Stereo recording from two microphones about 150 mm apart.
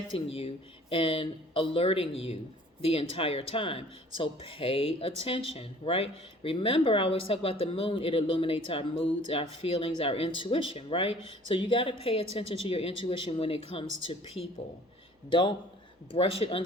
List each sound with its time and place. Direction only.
0.1 s speech: 40° left (ahead or behind)